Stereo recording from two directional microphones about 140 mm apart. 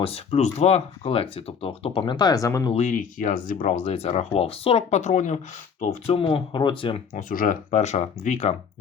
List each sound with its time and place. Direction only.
0.0 s speech: 45° left (ahead or behind); by 2.7 s 25° left (ahead or behind)
2.7 s speech: 65° left (ahead or behind)
6.1 s speech: 40° left (ahead or behind)
7.1 s speech: 80° left; by 8.5 s 55° left (ahead or behind)